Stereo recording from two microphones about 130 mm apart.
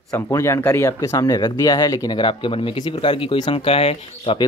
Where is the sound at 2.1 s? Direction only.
40° left (ahead or behind).